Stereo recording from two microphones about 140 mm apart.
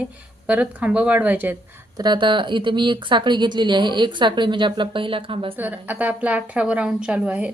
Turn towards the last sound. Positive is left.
turn(degrees=-10)  # may be behind; listen again after turning